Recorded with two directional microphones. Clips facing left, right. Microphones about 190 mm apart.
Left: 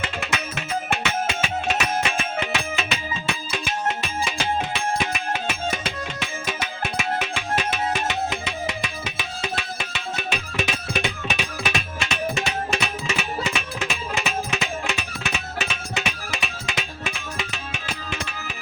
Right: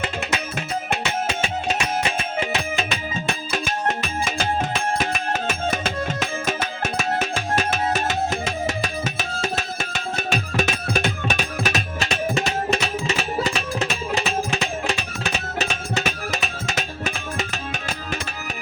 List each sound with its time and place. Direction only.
0.0 s music: 35° right (ahead or behind)